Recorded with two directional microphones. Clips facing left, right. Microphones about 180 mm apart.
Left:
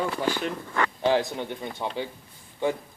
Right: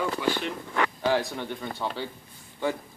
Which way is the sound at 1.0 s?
20° left (ahead or behind).